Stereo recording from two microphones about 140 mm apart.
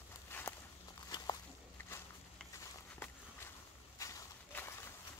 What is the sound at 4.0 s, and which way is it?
Walk, 25° left (ahead or behind).